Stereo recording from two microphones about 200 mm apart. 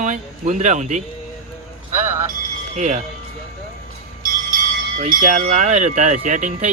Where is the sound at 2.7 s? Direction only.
35° right (ahead or behind).